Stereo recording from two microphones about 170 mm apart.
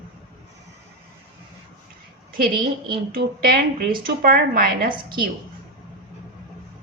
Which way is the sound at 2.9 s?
60° right (ahead or behind).